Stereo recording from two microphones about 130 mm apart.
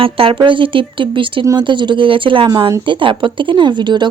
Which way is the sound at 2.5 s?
30° right (ahead or behind).